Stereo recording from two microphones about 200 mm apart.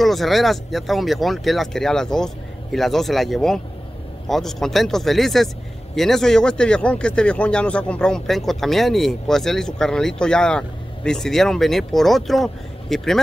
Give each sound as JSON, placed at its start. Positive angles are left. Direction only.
{"t": 0.0, "sound": "speech", "side_deg": 0}